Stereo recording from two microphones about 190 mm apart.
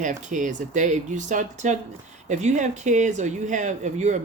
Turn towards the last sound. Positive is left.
turn(degrees=-40)  # may be behind; listen again after turning